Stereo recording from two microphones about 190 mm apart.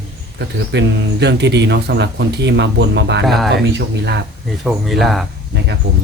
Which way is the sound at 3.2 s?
Centre (ahead or behind).